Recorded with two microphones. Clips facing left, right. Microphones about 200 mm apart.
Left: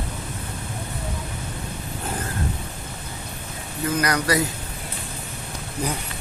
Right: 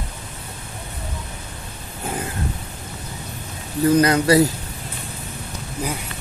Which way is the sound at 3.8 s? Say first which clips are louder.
Right 7 dB; 25° right (ahead or behind).